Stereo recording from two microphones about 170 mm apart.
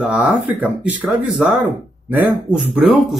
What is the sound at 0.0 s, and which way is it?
Speech, 5° right (ahead or behind).